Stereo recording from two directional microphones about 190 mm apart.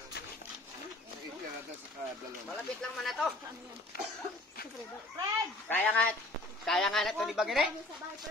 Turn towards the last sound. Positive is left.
turn(degrees=0)  # may be behind; listen again after turning